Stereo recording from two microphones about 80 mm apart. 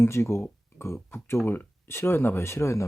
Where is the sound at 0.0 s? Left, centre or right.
Left.